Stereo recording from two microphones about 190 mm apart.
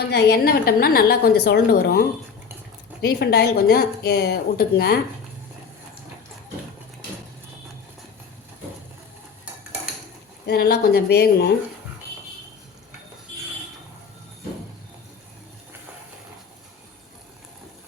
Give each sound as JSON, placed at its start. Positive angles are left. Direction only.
{"t": 0.0, "sound": "a woman's voice", "side_deg": 60}
{"t": 3.0, "sound": "a woman's voice", "side_deg": 55}
{"t": 10.4, "sound": "a woman's voice", "side_deg": 55}